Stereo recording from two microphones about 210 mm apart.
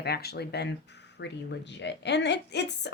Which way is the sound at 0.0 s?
50° left (ahead or behind).